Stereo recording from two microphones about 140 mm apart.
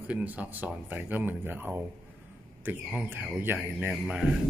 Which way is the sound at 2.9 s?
10° right (ahead or behind).